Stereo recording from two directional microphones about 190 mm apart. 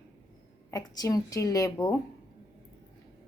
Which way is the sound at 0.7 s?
20° left (ahead or behind).